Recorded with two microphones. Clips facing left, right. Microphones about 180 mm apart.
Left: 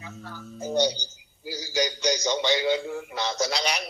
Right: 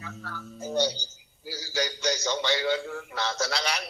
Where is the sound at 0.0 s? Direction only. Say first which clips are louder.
Even; 15° left (ahead or behind).